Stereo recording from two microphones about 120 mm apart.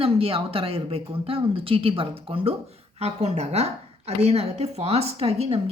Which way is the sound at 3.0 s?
65° right (ahead or behind).